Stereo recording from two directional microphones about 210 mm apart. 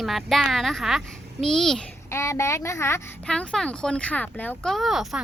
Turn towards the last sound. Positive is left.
turn(degrees=0)  # may be behind; listen again after turning